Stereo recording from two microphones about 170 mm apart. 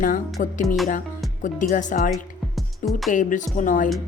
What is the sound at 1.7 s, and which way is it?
Speech, 50° left (ahead or behind).